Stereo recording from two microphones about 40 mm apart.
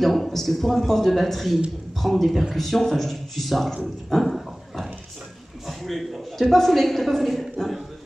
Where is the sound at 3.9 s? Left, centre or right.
Centre.